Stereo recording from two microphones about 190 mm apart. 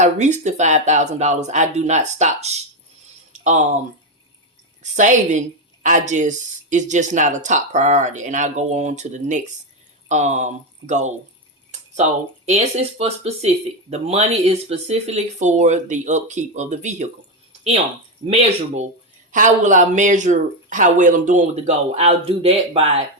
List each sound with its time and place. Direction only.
0.0 s a woman's voice: 40° right (ahead or behind)
3.3 s a sound: 40° right (ahead or behind)
4.8 s a woman's voice: 40° right (ahead or behind)
12.5 s a woman's voice: 35° right (ahead or behind)
18.3 s a woman's voice: 35° right (ahead or behind)